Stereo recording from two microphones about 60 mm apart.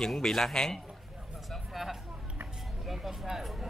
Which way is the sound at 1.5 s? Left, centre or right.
Centre.